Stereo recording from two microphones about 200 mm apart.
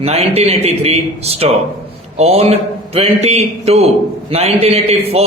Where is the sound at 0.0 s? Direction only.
30° right (ahead or behind).